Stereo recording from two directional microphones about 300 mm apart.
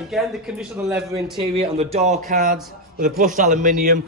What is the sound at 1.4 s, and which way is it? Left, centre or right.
A man's voice, centre.